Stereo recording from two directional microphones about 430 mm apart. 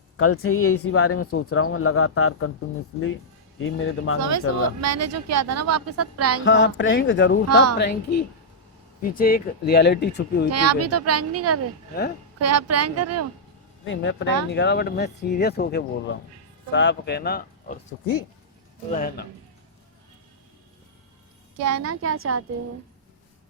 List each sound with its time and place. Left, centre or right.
0.2 s speech: left
3.6 s speech: left
4.2 s speech: right
6.4 s speech: left
7.4 s speech: right
7.8 s speech: left
10.5 s speech: right
13.8 s speech: left
21.6 s speech: right